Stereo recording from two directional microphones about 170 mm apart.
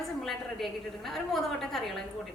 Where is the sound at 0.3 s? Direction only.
Centre (ahead or behind).